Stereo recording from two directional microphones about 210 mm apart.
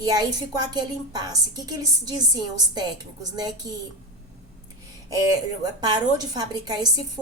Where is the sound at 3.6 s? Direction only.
20° right (ahead or behind).